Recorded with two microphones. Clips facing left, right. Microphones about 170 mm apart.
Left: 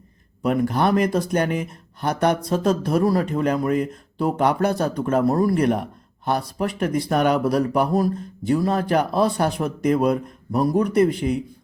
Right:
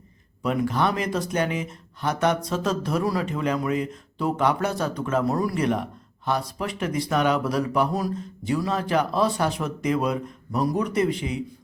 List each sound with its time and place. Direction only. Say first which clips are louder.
0.4 s a man's voice: left 3 dB; 50° left (ahead or behind)